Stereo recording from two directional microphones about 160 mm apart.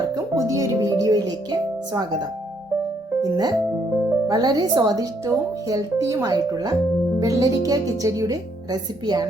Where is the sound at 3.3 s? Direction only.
25° right (ahead or behind).